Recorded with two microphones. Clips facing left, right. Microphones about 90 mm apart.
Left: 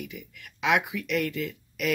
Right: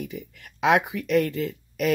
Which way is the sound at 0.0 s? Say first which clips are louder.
Right 5 dB; 35° right (ahead or behind).